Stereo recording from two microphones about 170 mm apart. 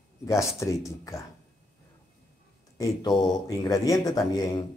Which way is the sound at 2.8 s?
25° left (ahead or behind).